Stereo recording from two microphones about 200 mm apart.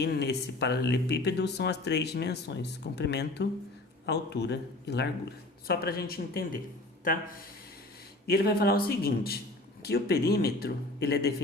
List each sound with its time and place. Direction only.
0.0 s speech: 55° left (ahead or behind)